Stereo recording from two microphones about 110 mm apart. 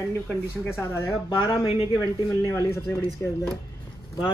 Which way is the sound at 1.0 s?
45° left (ahead or behind).